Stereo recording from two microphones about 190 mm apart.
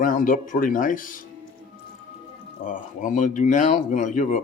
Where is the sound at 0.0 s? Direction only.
45° left (ahead or behind).